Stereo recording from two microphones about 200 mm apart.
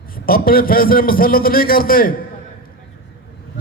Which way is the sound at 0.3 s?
45° left (ahead or behind).